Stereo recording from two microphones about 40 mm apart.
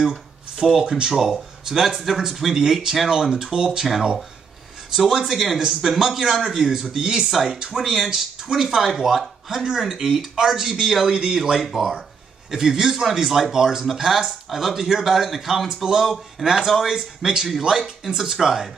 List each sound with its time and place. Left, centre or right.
0.0 s speech: centre
1.1 s speech: centre
4.9 s speech: centre
9.8 s speech: centre